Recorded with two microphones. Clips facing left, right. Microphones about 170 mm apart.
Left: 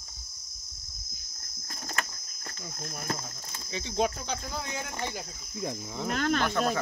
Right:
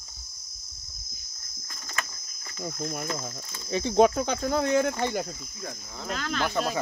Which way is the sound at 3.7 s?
50° right (ahead or behind).